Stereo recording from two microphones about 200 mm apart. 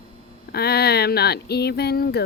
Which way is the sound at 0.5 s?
50° left (ahead or behind).